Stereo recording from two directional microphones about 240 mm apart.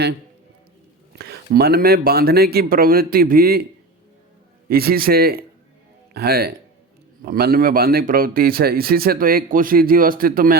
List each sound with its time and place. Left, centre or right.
1.2 s a man's voice: right
4.7 s a man's voice: right